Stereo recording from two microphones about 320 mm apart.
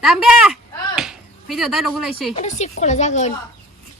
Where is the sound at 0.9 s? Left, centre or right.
Centre.